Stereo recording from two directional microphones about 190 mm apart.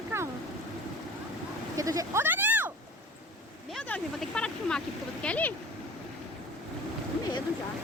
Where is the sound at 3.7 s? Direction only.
5° left (ahead or behind).